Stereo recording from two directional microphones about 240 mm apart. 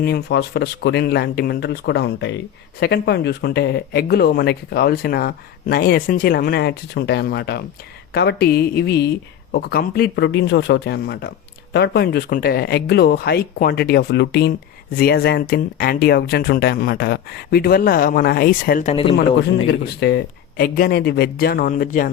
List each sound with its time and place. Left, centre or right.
0.0 s speech: left
19.1 s speech: left